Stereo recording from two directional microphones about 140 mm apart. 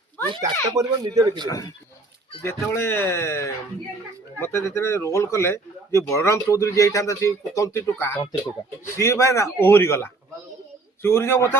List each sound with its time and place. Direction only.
0.8 s speech: 25° right (ahead or behind)
1.5 s a man's voice: 25° left (ahead or behind)